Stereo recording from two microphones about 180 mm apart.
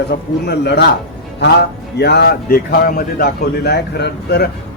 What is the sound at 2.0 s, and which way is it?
A man's voice, 65° left (ahead or behind).